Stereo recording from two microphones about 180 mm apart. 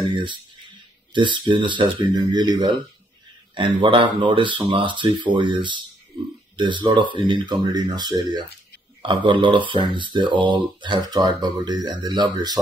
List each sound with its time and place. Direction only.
0.0 s speech: 25° right (ahead or behind)